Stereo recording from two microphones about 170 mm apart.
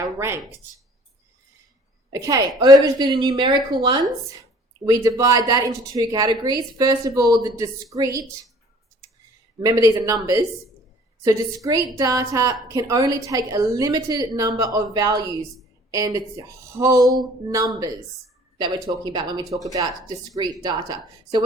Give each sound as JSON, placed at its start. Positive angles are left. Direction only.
{"t": 0.2, "sound": "speech", "side_deg": -15}
{"t": 2.0, "sound": "a woman's voice", "side_deg": -20}
{"t": 9.6, "sound": "a woman's voice", "side_deg": -20}
{"t": 19.0, "sound": "a woman's voice", "side_deg": -25}